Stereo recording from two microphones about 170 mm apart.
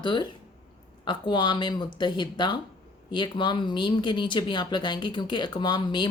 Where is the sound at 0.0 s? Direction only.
25° left (ahead or behind).